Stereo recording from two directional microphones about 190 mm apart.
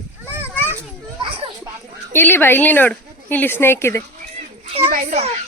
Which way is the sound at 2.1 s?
10° left (ahead or behind).